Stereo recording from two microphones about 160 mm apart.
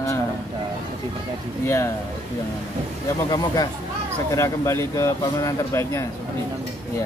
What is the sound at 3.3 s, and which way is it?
Speech, 25° left (ahead or behind).